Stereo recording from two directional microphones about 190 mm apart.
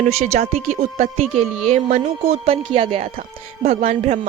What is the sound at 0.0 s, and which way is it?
A woman's voice, 35° right (ahead or behind).